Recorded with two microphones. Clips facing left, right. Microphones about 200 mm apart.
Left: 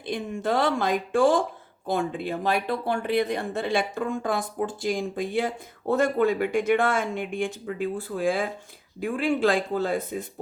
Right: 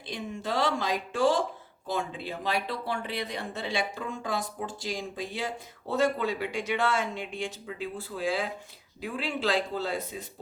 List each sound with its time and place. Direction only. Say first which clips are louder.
0.0 s speech: left 7 dB; 55° left (ahead or behind)